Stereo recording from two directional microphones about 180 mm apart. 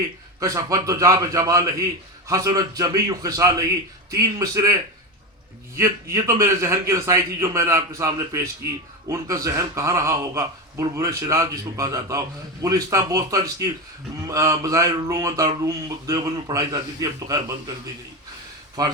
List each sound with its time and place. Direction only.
0.3 s a man's voice: 20° right (ahead or behind)
5.7 s a man's voice: 15° right (ahead or behind)
18.8 s a man's voice: 20° right (ahead or behind)